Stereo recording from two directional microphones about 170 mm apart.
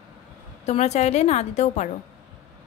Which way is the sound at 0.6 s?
40° left (ahead or behind).